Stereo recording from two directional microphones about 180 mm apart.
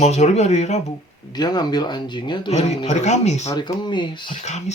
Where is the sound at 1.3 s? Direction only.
25° left (ahead or behind).